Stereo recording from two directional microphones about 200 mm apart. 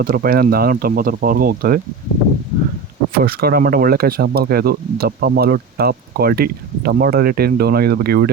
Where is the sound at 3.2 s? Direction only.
50° right (ahead or behind).